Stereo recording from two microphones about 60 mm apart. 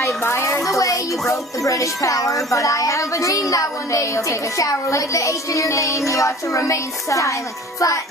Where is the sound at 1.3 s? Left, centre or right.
Left.